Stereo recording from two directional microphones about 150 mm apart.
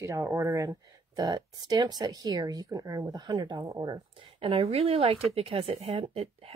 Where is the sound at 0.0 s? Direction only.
20° right (ahead or behind).